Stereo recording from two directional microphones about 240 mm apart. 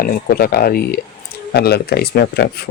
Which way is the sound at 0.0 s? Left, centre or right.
Left.